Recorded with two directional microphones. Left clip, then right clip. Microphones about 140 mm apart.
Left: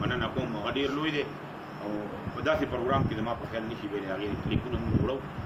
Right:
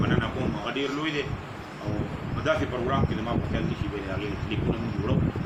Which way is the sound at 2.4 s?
20° left (ahead or behind).